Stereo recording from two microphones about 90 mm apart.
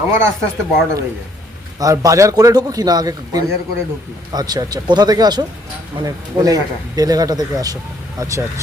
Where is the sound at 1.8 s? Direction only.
40° right (ahead or behind).